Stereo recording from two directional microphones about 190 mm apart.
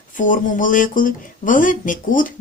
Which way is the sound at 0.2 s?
45° left (ahead or behind).